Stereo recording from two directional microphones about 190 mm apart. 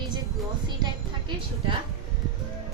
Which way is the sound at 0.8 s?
25° right (ahead or behind).